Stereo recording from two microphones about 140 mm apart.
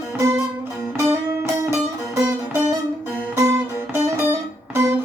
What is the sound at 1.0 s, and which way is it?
Music, 20° right (ahead or behind).